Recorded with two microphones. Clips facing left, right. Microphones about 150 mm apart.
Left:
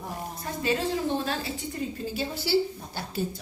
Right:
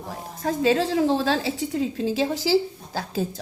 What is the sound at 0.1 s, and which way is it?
A woman's voice, 90° right.